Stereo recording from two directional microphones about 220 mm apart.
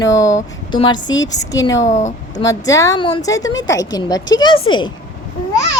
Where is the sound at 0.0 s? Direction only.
15° left (ahead or behind).